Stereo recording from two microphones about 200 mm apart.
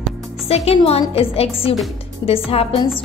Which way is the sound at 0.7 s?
30° left (ahead or behind).